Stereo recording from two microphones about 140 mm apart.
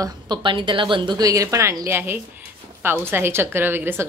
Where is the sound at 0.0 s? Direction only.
35° right (ahead or behind).